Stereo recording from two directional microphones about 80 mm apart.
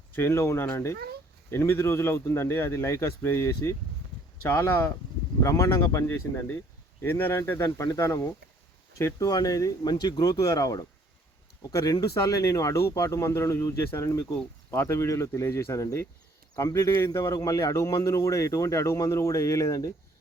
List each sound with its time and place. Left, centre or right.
0.1 s speech: left
4.4 s speech: left
5.4 s speech: left
9.1 s speech: left
14.1 s speech: left
14.8 s speech: left